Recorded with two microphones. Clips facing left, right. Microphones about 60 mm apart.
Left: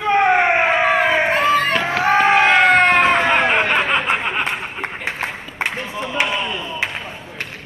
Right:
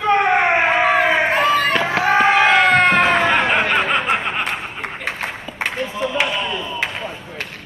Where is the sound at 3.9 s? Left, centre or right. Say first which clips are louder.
Even; centre.